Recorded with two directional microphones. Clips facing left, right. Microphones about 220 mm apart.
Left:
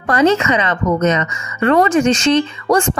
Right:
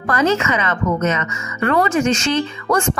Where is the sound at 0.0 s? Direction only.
30° left (ahead or behind).